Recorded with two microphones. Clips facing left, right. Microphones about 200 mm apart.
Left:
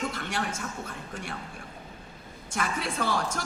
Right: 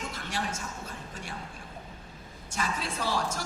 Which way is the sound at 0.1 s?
55° left (ahead or behind).